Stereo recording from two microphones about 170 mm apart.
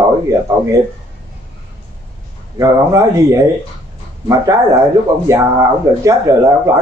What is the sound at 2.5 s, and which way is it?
A man's voice, 20° right (ahead or behind).